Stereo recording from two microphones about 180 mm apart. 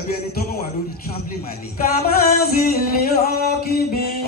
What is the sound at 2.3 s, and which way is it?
Music, 55° left (ahead or behind).